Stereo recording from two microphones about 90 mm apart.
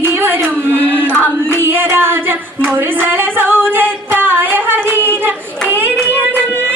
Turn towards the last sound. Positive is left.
turn(degrees=-20)  # may be behind; listen again after turning